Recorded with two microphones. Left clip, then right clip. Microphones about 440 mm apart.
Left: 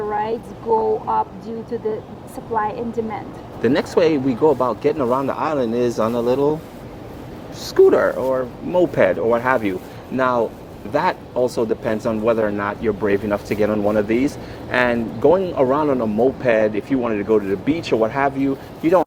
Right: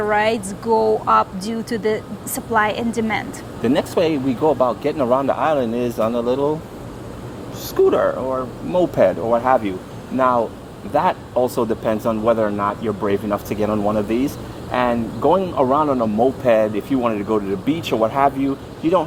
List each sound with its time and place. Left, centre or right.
0.1 s a woman's voice: right
3.6 s speech: centre
7.9 s speech: centre